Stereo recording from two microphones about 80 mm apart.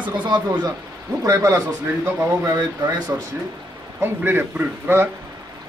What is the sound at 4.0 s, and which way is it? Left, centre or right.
Speech, right.